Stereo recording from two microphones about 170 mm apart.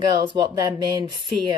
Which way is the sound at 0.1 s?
25° right (ahead or behind).